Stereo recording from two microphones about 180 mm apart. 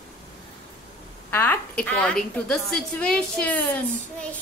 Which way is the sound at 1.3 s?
10° left (ahead or behind).